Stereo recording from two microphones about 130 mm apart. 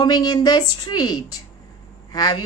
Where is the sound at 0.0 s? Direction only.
30° left (ahead or behind).